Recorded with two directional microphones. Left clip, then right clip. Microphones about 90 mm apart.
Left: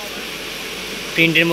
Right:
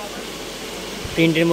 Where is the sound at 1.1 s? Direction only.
30° right (ahead or behind).